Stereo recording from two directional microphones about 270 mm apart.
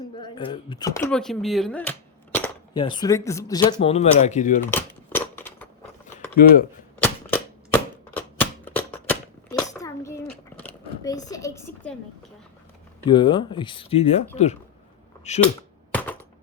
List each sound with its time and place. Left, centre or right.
0.2 s speech: centre
4.7 s a sound: centre
6.4 s cap gun: left
7.0 s cap gun: centre
11.3 s a sound: centre
13.1 s speech: centre
15.9 s typing: centre